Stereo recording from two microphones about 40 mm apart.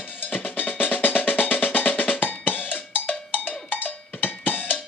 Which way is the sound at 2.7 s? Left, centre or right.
Left.